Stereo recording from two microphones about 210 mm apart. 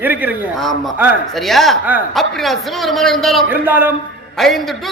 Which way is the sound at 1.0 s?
5° right (ahead or behind).